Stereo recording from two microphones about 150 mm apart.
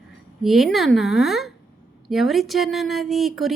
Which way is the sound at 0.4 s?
Centre (ahead or behind).